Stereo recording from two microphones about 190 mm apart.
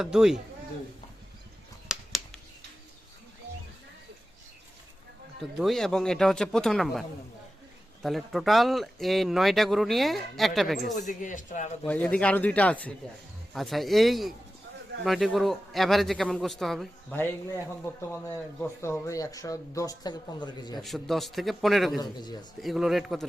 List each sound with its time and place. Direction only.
0.0 s speech: centre (ahead or behind)
1.9 s a sound: 5° right (ahead or behind)
5.4 s speech: centre (ahead or behind)
8.0 s speech: centre (ahead or behind)
10.9 s speech: 40° left (ahead or behind)
11.9 s a man's voice: 5° left (ahead or behind); by 20.8 s 25° left (ahead or behind)
20.8 s speech: centre (ahead or behind)
22.0 s speech: 20° left (ahead or behind)
22.6 s speech: centre (ahead or behind)